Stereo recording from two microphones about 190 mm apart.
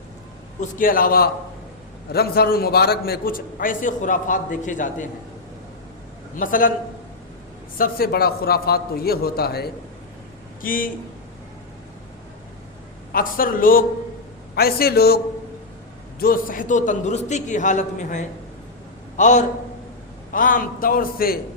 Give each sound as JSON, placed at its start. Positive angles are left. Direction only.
{"t": 0.6, "sound": "a man's voice", "side_deg": 45}
{"t": 6.3, "sound": "a man's voice", "side_deg": 45}
{"t": 7.8, "sound": "a man's voice", "side_deg": 50}
{"t": 13.1, "sound": "a man's voice", "side_deg": 50}
{"t": 16.2, "sound": "a man's voice", "side_deg": 45}